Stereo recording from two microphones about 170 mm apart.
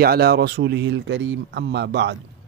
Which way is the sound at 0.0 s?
70° right (ahead or behind).